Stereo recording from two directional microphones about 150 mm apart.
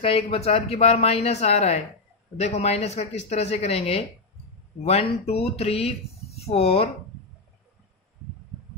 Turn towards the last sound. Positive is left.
turn(degrees=40)  # may be behind; listen again after turning